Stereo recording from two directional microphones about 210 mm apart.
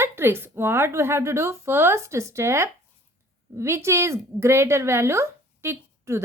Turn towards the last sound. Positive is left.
turn(degrees=-10)  # may be behind; listen again after turning